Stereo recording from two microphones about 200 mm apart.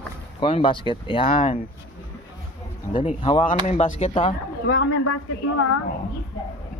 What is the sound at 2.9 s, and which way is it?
Speech, 25° left (ahead or behind).